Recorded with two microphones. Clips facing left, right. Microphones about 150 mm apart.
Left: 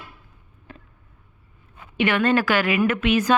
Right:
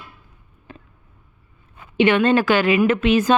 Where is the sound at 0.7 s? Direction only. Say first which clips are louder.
Right 2 dB; 20° right (ahead or behind).